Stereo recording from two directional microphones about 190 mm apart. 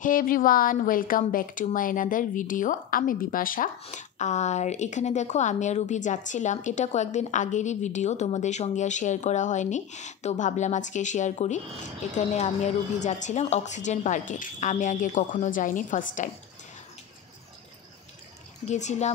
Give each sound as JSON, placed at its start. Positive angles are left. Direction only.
{"t": 0.0, "sound": "a woman's voice", "side_deg": 45}
{"t": 18.7, "sound": "a woman's voice", "side_deg": 35}